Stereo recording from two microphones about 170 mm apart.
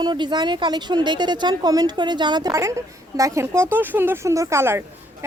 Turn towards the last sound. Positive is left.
turn(degrees=-15)  # may be behind; listen again after turning